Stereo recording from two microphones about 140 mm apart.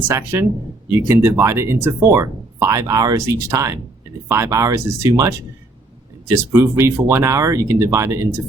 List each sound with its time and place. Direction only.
0.1 s speech: 20° right (ahead or behind)